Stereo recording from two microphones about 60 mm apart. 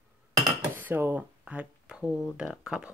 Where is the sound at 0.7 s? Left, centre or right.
Right.